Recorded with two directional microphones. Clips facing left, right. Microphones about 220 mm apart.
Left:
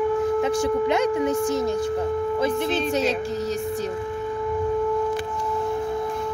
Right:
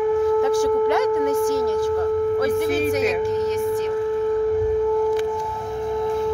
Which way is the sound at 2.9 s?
30° left (ahead or behind).